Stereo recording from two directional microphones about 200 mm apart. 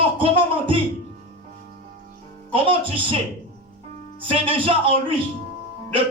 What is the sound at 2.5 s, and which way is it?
Speech, 25° right (ahead or behind).